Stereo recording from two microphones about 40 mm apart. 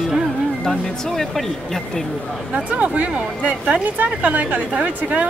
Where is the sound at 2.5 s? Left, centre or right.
Right.